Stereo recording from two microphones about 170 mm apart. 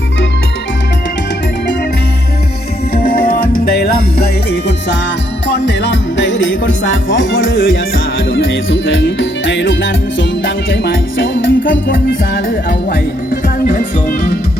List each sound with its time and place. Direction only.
2.9 s music: 60° left (ahead or behind)
5.5 s music: 90° left
12.5 s music: 60° left (ahead or behind)